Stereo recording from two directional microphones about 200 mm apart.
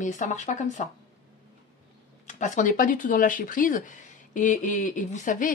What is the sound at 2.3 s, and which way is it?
A woman's voice, 40° left (ahead or behind).